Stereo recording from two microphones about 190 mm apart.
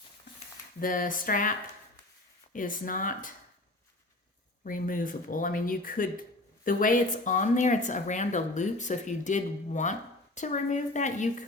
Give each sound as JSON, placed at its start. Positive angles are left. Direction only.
{"t": 0.8, "sound": "speech", "side_deg": 45}
{"t": 4.6, "sound": "speech", "side_deg": 45}